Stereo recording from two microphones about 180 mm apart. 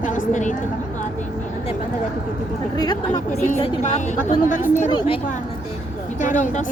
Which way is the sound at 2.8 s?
20° left (ahead or behind).